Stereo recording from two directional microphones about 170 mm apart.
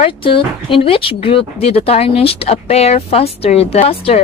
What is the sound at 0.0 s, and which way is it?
Speech, 30° left (ahead or behind).